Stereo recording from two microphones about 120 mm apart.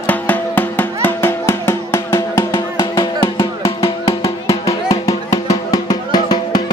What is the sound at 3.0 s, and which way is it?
Music, 45° left (ahead or behind).